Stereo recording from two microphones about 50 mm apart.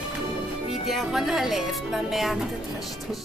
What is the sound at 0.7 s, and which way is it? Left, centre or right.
Speech, centre.